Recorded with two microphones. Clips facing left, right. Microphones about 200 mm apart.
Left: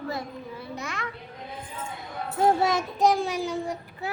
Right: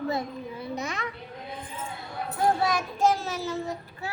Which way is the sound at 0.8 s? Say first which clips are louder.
Right 1 dB; 20° right (ahead or behind).